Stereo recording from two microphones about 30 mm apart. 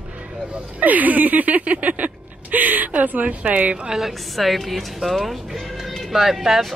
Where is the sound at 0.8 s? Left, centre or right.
Right.